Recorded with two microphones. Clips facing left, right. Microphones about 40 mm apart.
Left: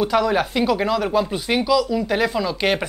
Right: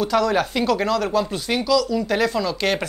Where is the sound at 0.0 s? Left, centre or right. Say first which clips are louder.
Left 1 dB; centre.